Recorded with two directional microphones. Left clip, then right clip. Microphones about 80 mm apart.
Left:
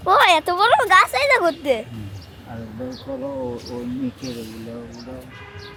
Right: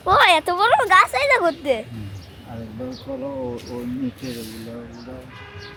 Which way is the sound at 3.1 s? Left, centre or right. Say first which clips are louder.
Left 1 dB; centre.